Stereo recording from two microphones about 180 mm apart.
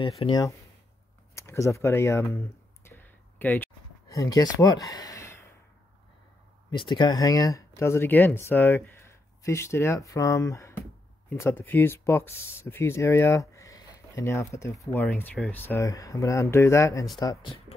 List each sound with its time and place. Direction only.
0.0 s speech: 30° left (ahead or behind)
1.3 s a sound: 15° left (ahead or behind)
6.7 s speech: 25° left (ahead or behind)